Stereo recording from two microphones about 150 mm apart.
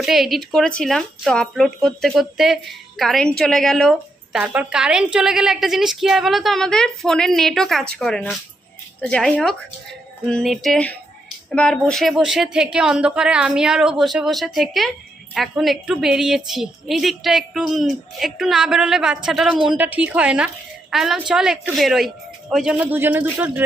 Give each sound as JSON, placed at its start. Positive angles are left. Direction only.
{"t": 0.0, "sound": "a woman's voice", "side_deg": 0}